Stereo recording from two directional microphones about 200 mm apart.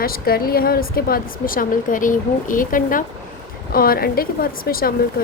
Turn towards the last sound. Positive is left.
turn(degrees=45)  # may be behind; listen again after turning